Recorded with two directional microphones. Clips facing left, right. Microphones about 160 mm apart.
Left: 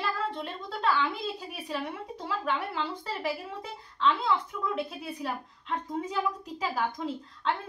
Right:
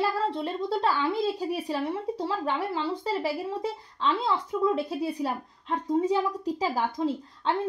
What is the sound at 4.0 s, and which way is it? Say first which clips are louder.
A woman's voice: even; 30° right (ahead or behind).